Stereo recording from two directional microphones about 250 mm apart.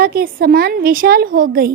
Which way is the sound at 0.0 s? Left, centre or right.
Right.